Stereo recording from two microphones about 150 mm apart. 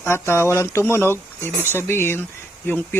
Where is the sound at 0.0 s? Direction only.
15° left (ahead or behind).